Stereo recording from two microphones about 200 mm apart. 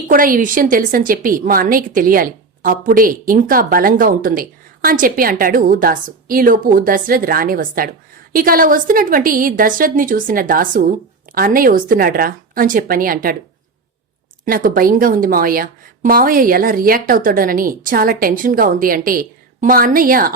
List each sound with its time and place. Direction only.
0.1 s a woman's voice: 45° right (ahead or behind)
14.4 s a woman's voice: 45° right (ahead or behind)